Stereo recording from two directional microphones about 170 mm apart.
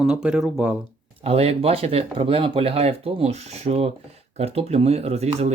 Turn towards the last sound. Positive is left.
turn(degrees=-40)  # may be behind; listen again after turning